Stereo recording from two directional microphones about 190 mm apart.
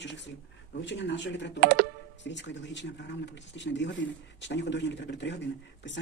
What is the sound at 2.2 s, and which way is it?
Speech, 70° left (ahead or behind).